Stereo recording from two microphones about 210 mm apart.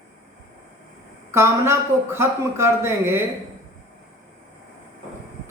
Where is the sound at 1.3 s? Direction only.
10° right (ahead or behind).